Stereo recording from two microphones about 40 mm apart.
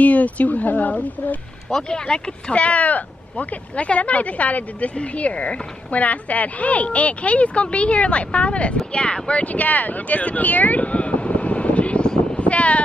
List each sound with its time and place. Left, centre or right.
0.0 s speech: left
1.9 s speech: left
2.6 s speech: left